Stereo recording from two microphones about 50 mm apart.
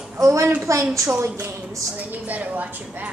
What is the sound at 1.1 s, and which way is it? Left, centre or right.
Speech, right.